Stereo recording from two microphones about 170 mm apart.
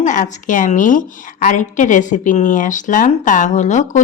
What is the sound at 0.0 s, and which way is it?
A woman's voice, 45° left (ahead or behind).